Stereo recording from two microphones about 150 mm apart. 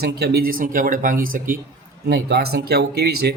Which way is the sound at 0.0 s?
90° right.